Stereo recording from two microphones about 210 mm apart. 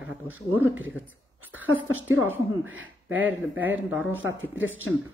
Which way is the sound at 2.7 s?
70° right (ahead or behind).